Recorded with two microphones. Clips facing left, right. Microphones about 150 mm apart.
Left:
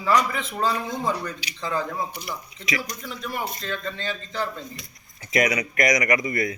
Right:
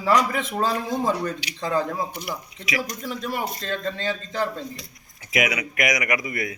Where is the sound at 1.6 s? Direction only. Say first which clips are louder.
Right 3 dB; 50° right (ahead or behind).